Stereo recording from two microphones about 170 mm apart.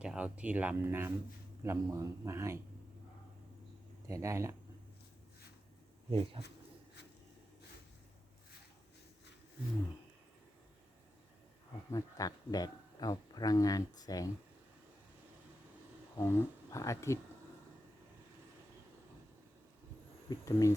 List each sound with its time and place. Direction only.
0.0 s speech: 5° right (ahead or behind)
4.1 s speech: 15° right (ahead or behind)
6.1 s speech: 30° right (ahead or behind)
11.9 s speech: 20° left (ahead or behind)
16.1 s speech: 15° left (ahead or behind)
20.3 s speech: 20° left (ahead or behind)